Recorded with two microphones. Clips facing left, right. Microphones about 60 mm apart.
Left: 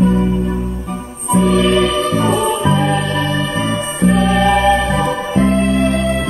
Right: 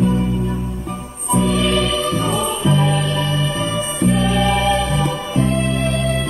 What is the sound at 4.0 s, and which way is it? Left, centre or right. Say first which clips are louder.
Music: left 4 dB; left.